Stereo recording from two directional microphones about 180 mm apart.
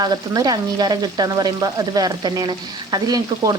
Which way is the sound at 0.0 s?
20° right (ahead or behind).